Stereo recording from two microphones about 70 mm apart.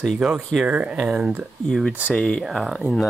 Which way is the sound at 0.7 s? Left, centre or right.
Centre.